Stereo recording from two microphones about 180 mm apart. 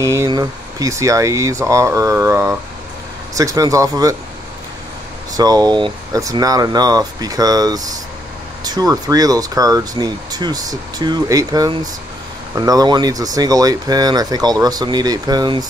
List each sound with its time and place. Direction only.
0.0 s speech: 15° right (ahead or behind)
5.3 s speech: 20° right (ahead or behind)